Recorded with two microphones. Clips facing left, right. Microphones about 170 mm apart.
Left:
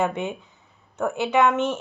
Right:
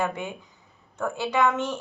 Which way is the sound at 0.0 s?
25° left (ahead or behind).